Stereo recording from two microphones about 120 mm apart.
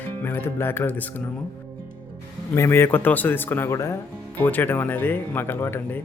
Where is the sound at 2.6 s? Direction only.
20° left (ahead or behind).